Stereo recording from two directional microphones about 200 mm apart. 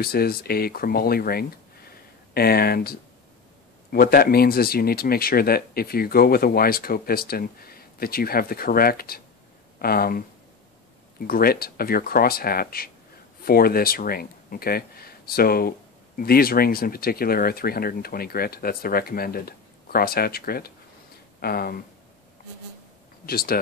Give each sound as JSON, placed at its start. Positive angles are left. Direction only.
{"t": 0.0, "sound": "speech", "side_deg": 50}
{"t": 23.2, "sound": "speech", "side_deg": 50}